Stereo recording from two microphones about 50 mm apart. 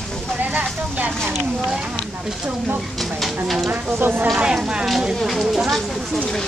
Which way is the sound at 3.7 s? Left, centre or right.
Right.